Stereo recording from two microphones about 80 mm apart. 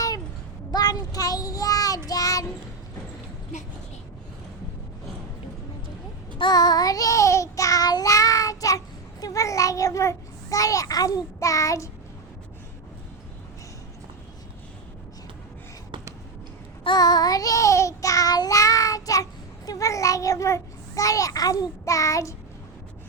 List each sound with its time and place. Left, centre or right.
0.7 s child singing: left
6.4 s child singing: left
9.2 s a child's voice: left
11.3 s child singing: left
16.8 s child singing: left